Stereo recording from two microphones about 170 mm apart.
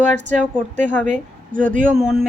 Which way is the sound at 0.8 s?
45° right (ahead or behind).